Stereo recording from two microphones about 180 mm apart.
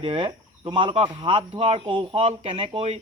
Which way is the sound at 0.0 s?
30° right (ahead or behind).